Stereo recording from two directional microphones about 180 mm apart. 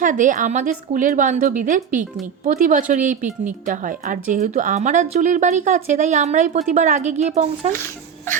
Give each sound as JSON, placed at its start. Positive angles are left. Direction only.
{"t": 0.0, "sound": "speech", "side_deg": -45}